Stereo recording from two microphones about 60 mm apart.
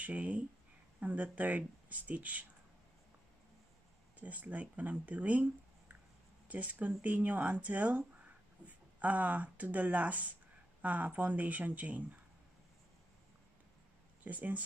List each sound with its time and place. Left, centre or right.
0.0 s speech: right
4.2 s speech: right
14.2 s speech: right